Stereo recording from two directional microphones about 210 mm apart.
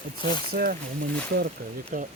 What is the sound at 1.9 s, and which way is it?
Speech, 40° right (ahead or behind).